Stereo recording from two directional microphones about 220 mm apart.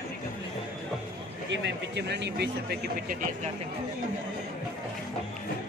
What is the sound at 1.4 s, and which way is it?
A man's voice, 55° right (ahead or behind).